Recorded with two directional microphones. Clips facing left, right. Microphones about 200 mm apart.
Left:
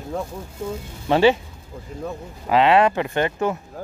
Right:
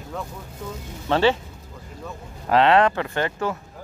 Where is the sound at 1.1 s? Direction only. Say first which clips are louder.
Left 3 dB; 15° left (ahead or behind).